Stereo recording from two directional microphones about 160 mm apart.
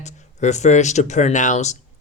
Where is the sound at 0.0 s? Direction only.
45° left (ahead or behind).